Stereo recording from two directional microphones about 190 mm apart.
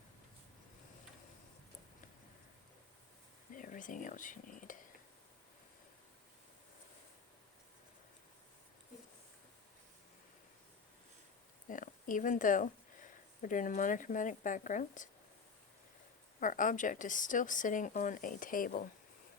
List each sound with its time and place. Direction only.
3.5 s speech: 45° left (ahead or behind)
11.7 s speech: 45° left (ahead or behind)
16.4 s speech: 45° left (ahead or behind)